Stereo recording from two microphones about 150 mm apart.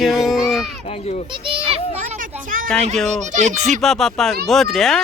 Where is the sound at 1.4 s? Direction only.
35° right (ahead or behind).